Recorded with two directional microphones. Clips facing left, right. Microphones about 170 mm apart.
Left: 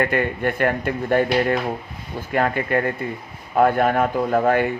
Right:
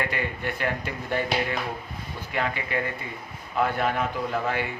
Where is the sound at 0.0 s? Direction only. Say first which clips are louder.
Left 8 dB; 50° left (ahead or behind).